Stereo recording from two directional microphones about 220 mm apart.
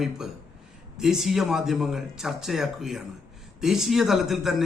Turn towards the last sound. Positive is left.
turn(degrees=0)  # may be behind; listen again after turning